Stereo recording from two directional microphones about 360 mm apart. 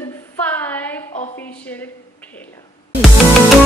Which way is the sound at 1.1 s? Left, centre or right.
Centre.